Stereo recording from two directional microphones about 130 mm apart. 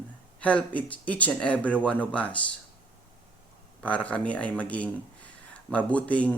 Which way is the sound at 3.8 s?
10° left (ahead or behind).